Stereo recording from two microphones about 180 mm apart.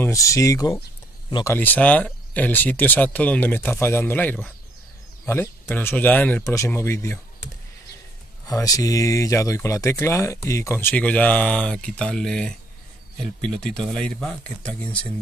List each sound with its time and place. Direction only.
0.0 s speech: 15° left (ahead or behind)
8.5 s speech: 20° left (ahead or behind)